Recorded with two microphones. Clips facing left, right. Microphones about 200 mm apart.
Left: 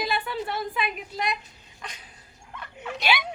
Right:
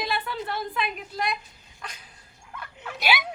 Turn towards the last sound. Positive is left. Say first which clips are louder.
# even
turn(degrees=-5)  # may be behind; listen again after turning